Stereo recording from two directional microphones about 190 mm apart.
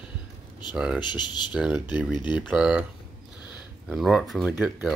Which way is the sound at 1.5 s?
5° right (ahead or behind).